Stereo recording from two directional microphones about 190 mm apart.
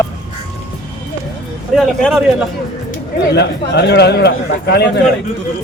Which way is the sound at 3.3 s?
60° left (ahead or behind).